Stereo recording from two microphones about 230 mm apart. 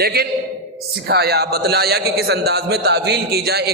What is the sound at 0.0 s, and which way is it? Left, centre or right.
A man's voice, right.